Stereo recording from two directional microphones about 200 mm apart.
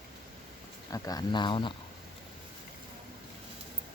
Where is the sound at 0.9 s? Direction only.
20° left (ahead or behind).